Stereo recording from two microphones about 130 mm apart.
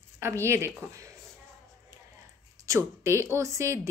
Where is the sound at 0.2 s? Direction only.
20° right (ahead or behind).